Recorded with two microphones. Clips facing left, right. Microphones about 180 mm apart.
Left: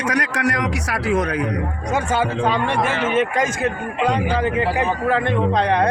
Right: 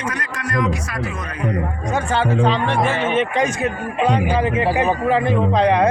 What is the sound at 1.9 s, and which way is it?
A man's voice, 10° left (ahead or behind).